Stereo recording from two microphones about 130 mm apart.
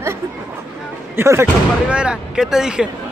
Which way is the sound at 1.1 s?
20° right (ahead or behind).